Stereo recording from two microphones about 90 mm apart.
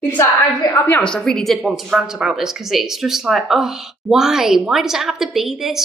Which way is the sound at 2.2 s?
5° right (ahead or behind).